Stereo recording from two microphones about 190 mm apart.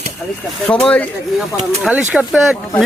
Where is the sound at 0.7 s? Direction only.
5° left (ahead or behind).